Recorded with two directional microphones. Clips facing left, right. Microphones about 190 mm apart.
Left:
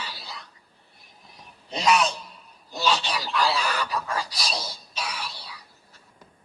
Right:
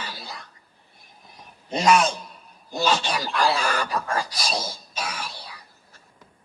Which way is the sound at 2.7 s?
50° right (ahead or behind).